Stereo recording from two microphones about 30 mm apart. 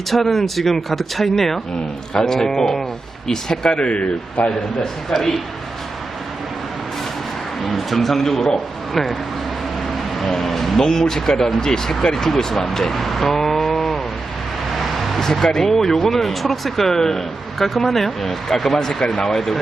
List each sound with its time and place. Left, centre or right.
0.1 s speech: centre
3.7 s a man's voice: left
5.0 s speech: centre
7.6 s speech: centre
10.2 s speech: centre
10.8 s speech: left
15.2 s speech: centre